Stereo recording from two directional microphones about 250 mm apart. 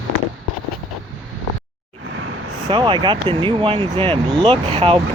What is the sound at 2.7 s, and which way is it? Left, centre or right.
Speech, centre.